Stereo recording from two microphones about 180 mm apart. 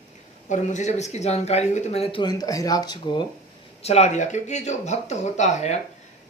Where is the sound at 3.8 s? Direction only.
40° left (ahead or behind).